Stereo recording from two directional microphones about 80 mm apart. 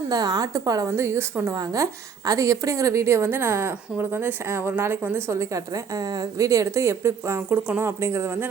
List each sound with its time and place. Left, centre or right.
0.1 s a woman's voice: right
0.9 s a woman's voice: right